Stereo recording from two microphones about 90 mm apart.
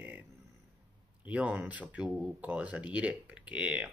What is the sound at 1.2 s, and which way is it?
Speech, 15° right (ahead or behind).